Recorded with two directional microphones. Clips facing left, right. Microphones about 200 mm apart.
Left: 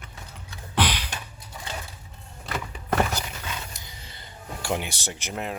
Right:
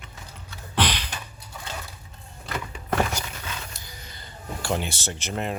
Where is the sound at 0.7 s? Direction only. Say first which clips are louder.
Even; 10° left (ahead or behind).